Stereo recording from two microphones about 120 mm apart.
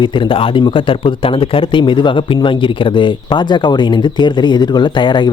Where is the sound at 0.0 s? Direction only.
45° left (ahead or behind).